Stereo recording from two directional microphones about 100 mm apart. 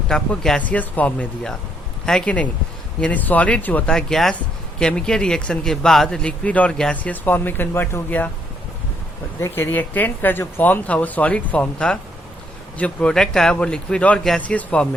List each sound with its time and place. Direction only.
0.1 s a man's voice: 5° left (ahead or behind)
9.4 s a man's voice: 20° left (ahead or behind)